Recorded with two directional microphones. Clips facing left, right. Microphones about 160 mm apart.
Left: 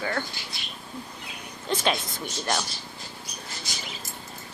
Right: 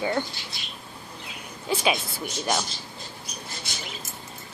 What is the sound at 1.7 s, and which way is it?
Speech, 10° right (ahead or behind).